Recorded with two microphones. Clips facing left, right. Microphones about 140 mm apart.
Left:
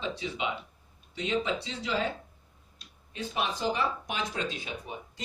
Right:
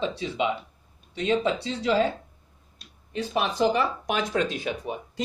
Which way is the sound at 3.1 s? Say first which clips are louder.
Right 6 dB; 70° right (ahead or behind).